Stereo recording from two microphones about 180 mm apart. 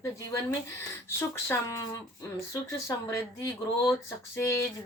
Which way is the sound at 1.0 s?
15° left (ahead or behind).